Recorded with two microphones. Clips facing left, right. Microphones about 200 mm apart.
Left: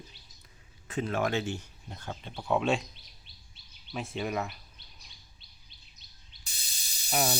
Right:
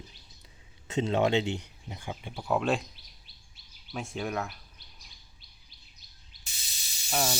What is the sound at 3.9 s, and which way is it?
Speech, centre (ahead or behind).